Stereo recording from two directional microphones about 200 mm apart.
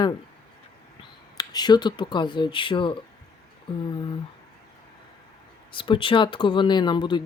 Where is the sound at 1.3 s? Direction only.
20° left (ahead or behind).